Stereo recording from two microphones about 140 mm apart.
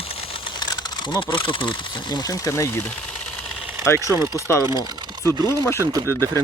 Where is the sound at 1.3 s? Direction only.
35° left (ahead or behind).